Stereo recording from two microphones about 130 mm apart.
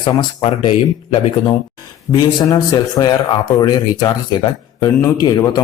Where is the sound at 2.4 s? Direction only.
30° left (ahead or behind).